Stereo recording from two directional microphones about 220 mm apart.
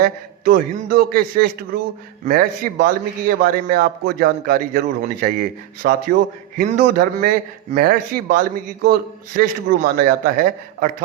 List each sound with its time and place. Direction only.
0.0 s a man's voice: 45° right (ahead or behind)